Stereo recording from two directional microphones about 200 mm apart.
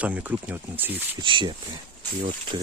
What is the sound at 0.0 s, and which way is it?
Speech, 10° right (ahead or behind).